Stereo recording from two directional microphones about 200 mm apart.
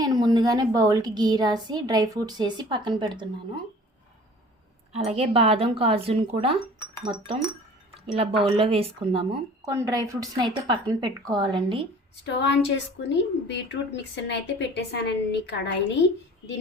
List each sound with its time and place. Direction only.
0.0 s a woman's voice: 20° right (ahead or behind)
4.9 s a woman's voice: 30° right (ahead or behind)
8.0 s a woman's voice: 25° right (ahead or behind)
9.6 s a woman's voice: 15° right (ahead or behind)
12.2 s a woman's voice: 60° left (ahead or behind)